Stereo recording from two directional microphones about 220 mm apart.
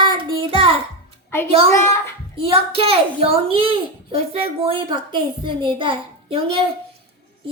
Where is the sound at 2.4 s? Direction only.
25° right (ahead or behind).